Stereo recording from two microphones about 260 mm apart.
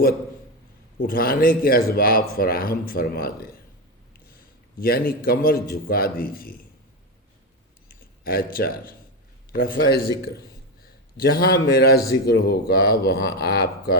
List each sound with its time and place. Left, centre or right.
1.0 s speech: left
4.8 s speech: left
7.9 s a man's voice: left